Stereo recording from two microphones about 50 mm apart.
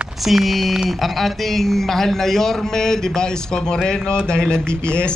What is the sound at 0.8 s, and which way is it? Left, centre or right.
A man's voice, centre.